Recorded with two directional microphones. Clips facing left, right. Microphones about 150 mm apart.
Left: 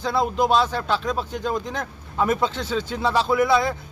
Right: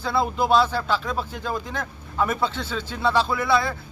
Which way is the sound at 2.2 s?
20° left (ahead or behind).